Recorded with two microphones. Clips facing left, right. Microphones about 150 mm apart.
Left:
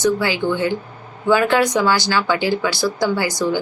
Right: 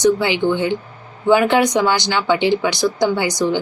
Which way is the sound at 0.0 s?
20° right (ahead or behind).